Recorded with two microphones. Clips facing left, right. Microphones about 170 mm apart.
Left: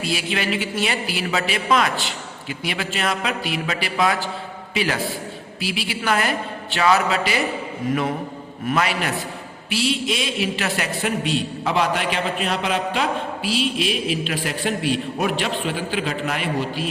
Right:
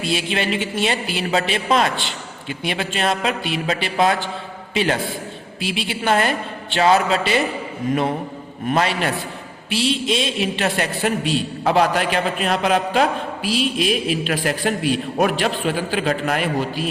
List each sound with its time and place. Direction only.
0.0 s a man's voice: 25° right (ahead or behind)
8.7 s a man's voice: 30° right (ahead or behind); by 16.9 s 45° right (ahead or behind)